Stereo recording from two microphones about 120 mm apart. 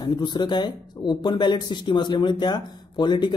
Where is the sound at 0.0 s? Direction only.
40° left (ahead or behind).